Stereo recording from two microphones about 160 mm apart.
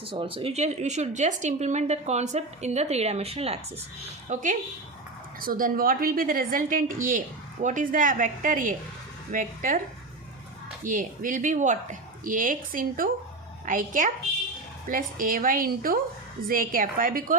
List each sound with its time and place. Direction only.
0.0 s speech: 35° right (ahead or behind)
4.3 s a woman's voice: 50° right (ahead or behind)
10.8 s a woman's voice: 55° right (ahead or behind)